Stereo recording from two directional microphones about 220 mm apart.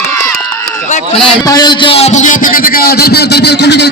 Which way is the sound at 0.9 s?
35° left (ahead or behind).